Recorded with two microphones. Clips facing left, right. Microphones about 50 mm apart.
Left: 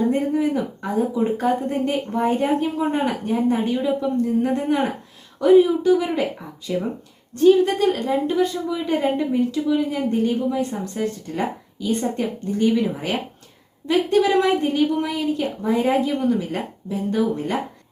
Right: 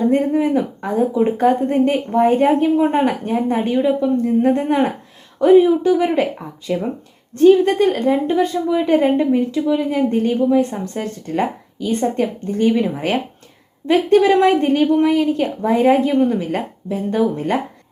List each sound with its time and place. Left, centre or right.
0.1 s speech: right
3.8 s speech: right